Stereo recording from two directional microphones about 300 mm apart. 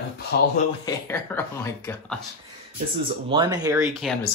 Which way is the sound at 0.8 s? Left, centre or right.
Centre.